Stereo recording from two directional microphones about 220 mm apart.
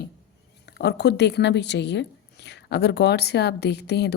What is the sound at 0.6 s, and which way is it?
Speech, 50° left (ahead or behind).